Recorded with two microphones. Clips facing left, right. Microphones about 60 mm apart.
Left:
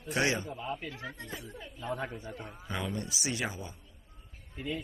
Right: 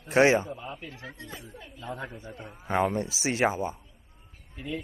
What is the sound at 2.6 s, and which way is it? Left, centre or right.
A man's voice, right.